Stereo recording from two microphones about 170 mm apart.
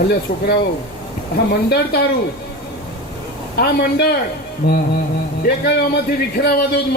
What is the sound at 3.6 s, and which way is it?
A man's voice, 70° left (ahead or behind).